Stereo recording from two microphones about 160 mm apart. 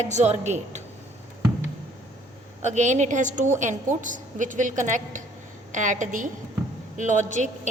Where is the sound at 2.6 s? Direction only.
50° right (ahead or behind).